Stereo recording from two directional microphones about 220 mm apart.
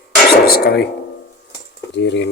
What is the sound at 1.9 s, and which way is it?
Speech, 50° left (ahead or behind).